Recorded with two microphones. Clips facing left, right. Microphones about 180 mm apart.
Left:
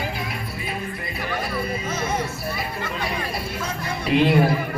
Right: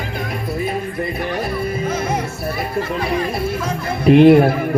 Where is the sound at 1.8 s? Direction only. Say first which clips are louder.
Right 7 dB; 50° right (ahead or behind).